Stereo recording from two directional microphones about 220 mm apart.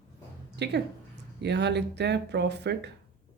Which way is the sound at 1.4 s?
50° right (ahead or behind).